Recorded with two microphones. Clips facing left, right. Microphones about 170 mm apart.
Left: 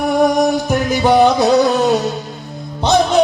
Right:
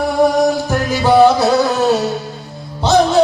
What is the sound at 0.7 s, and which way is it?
Music, 20° left (ahead or behind).